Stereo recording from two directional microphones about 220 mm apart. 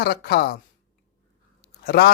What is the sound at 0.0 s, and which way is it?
Speech, 45° left (ahead or behind).